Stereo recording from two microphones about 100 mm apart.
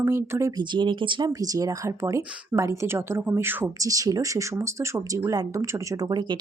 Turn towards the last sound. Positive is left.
turn(degrees=-45)  # may be behind; listen again after turning